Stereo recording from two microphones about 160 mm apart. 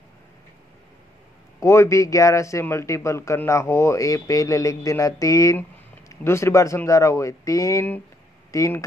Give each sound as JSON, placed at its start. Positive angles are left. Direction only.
{"t": 1.6, "sound": "a man's voice", "side_deg": 20}